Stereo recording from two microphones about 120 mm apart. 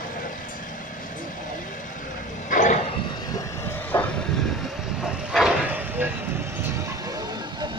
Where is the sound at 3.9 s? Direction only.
20° left (ahead or behind).